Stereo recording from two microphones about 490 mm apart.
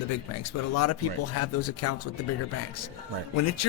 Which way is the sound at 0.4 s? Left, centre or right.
Left.